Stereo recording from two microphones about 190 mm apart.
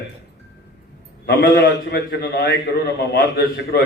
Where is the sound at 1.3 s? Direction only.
55° left (ahead or behind).